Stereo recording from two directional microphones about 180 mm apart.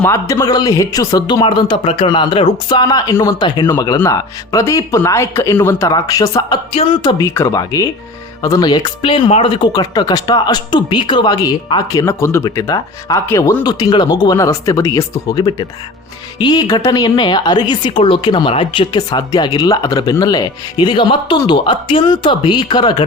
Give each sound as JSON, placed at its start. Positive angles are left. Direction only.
{"t": 0.0, "sound": "speech", "side_deg": 15}